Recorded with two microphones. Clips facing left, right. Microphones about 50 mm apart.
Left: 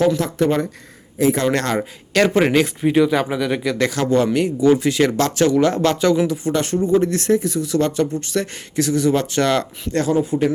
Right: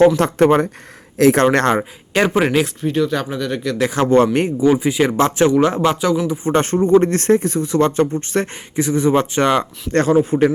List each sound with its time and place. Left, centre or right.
0.2 s speech: right
1.2 s speech: right
1.5 s speech: right
2.3 s speech: centre
2.8 s speech: centre
3.9 s speech: right
4.6 s speech: centre
6.2 s speech: right
6.5 s speech: right
8.7 s speech: right
9.9 s speech: right